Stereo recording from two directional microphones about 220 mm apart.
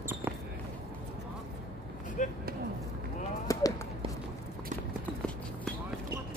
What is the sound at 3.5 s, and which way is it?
Run, 15° left (ahead or behind).